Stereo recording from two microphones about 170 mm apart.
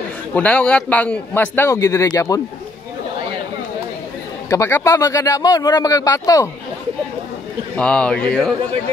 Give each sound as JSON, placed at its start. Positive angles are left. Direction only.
{"t": 0.3, "sound": "a man's voice", "side_deg": 10}
{"t": 4.5, "sound": "speech", "side_deg": 15}
{"t": 7.7, "sound": "a man's voice", "side_deg": 5}